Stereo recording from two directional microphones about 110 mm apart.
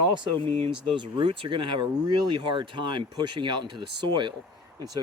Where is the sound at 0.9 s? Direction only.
50° right (ahead or behind).